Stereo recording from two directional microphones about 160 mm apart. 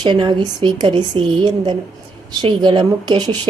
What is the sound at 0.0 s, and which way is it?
A woman's voice, 30° right (ahead or behind).